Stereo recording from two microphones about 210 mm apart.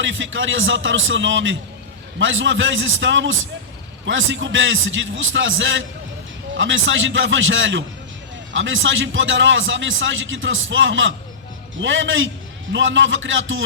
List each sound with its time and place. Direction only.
0.0 s a man's voice: 65° right (ahead or behind)